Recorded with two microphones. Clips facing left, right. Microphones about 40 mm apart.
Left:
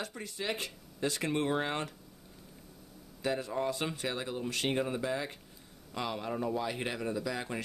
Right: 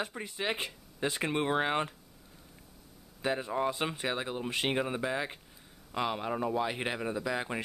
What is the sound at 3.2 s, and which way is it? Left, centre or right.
Speech, right.